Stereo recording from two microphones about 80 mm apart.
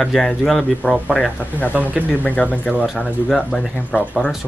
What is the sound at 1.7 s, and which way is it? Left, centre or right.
Speech, right.